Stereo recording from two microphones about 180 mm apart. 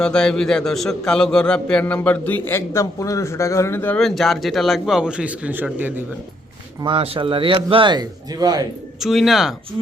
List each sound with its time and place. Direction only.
0.0 s a man's voice: 5° left (ahead or behind)
6.8 s speech: 30° right (ahead or behind)
9.0 s a man's voice: centre (ahead or behind)